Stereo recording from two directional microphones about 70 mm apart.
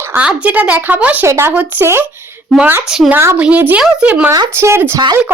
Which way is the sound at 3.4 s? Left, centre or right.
Right.